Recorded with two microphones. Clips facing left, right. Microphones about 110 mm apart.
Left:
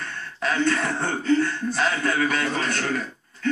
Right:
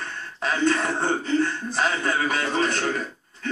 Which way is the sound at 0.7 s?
30° right (ahead or behind).